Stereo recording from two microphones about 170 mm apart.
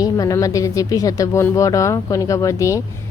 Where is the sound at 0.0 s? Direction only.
20° left (ahead or behind).